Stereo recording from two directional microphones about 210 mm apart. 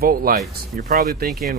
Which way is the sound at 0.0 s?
45° right (ahead or behind).